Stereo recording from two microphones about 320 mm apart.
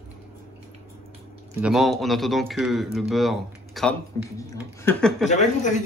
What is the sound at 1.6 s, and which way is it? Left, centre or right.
A man's voice, centre.